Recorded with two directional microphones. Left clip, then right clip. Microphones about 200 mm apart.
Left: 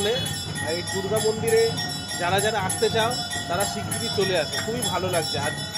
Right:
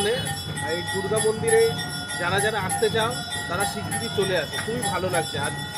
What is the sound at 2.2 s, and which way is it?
Speech, 5° left (ahead or behind).